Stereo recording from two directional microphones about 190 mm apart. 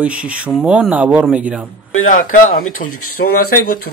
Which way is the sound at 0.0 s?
5° right (ahead or behind).